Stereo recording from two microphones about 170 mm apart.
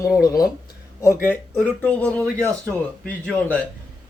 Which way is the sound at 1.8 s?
10° left (ahead or behind).